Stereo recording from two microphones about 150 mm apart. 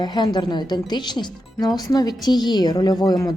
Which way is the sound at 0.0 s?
30° left (ahead or behind).